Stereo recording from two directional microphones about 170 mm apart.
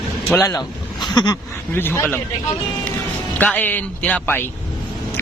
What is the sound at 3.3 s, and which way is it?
Speech, 10° left (ahead or behind).